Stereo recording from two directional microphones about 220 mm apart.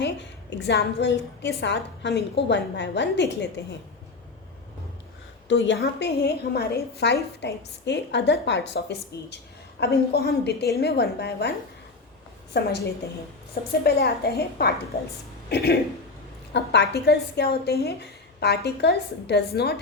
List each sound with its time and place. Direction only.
0.0 s a woman's voice: 50° left (ahead or behind)
5.5 s a woman's voice: 55° left (ahead or behind)
12.5 s a woman's voice: 50° left (ahead or behind)